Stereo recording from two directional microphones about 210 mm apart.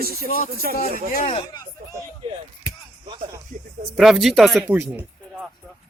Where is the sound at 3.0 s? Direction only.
20° right (ahead or behind).